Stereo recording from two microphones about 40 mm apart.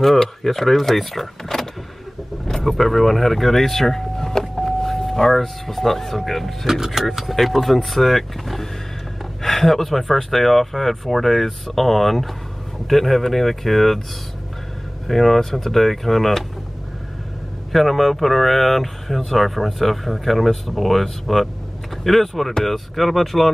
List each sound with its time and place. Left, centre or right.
0.0 s speech: centre
15.0 s speech: centre
17.7 s speech: centre